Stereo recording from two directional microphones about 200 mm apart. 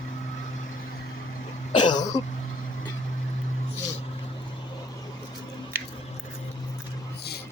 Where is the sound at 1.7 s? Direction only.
20° left (ahead or behind).